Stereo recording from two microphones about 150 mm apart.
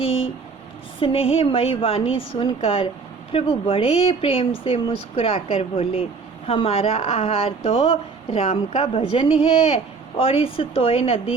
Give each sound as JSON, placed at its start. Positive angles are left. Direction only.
{"t": 0.9, "sound": "speech", "side_deg": 35}